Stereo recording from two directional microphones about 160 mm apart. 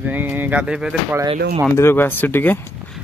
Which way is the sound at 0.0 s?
10° right (ahead or behind).